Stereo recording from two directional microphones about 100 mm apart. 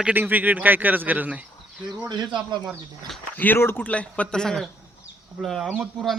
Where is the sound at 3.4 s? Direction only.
20° left (ahead or behind); by 5.8 s centre (ahead or behind).